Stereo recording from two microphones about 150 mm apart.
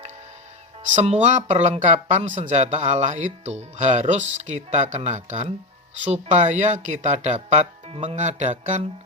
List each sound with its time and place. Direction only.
0.8 s speech: 50° right (ahead or behind)